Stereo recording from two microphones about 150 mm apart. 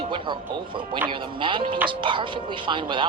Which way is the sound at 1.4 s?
35° right (ahead or behind).